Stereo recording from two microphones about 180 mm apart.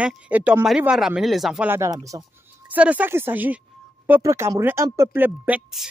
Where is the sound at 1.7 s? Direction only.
15° right (ahead or behind).